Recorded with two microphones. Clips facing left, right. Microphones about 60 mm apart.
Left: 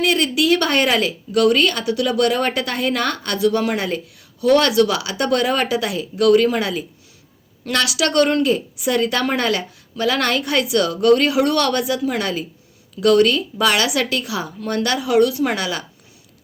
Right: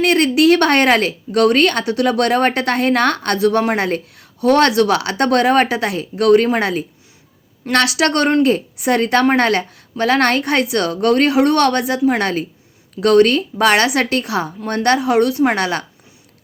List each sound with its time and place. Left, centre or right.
0.0 s a woman's voice: right